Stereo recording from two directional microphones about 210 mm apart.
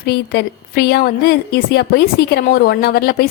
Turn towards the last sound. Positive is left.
turn(degrees=45)  # may be behind; listen again after turning